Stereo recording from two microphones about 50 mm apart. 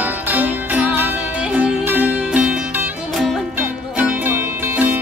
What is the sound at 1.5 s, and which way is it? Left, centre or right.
Music, right.